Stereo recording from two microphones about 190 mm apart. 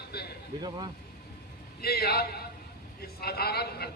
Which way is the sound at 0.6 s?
20° right (ahead or behind).